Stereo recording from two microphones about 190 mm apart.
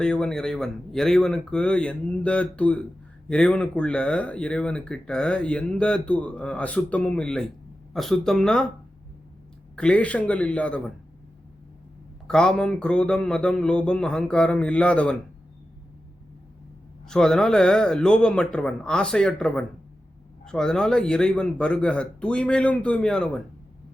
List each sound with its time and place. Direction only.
0.0 s speech: 5° left (ahead or behind)
9.7 s a man's voice: 5° left (ahead or behind)
12.3 s speech: 5° left (ahead or behind)
17.1 s speech: 5° left (ahead or behind)